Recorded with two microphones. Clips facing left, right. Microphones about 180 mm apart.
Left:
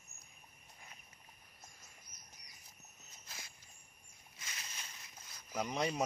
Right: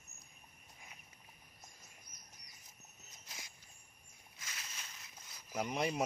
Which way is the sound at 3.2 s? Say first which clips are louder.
Even; 15° right (ahead or behind).